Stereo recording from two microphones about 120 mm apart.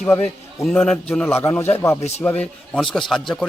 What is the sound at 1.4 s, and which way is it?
Speech, 20° left (ahead or behind).